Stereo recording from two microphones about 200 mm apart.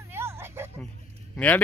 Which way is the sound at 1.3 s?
5° left (ahead or behind).